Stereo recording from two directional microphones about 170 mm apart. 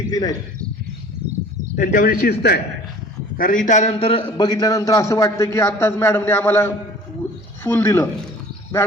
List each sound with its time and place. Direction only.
0.1 s a man's voice: 20° left (ahead or behind)
1.7 s speech: 55° left (ahead or behind); by 2.6 s 70° left (ahead or behind)
3.3 s a man's voice: 55° left (ahead or behind); by 8.0 s 15° left (ahead or behind)